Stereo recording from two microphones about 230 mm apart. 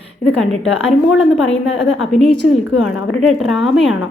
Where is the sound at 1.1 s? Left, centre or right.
Left.